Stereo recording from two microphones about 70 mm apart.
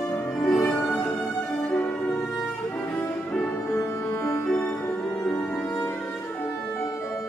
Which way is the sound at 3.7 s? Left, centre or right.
Left.